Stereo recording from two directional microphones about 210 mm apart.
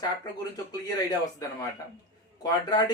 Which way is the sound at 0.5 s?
20° left (ahead or behind).